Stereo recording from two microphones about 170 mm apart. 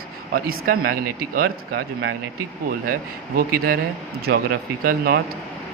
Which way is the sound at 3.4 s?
60° right (ahead or behind).